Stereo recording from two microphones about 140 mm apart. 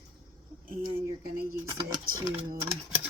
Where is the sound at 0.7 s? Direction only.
90° right.